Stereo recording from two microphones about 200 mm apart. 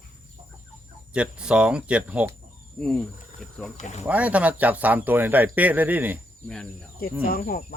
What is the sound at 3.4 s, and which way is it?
Speech, 5° left (ahead or behind).